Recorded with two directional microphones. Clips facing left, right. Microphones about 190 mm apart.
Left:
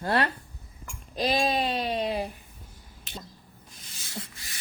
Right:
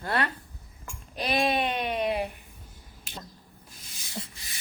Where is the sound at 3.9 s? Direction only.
20° right (ahead or behind).